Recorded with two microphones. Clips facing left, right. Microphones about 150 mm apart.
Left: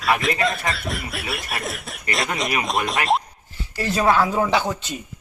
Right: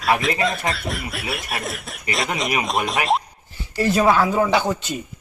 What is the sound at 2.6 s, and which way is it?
Speech, centre (ahead or behind).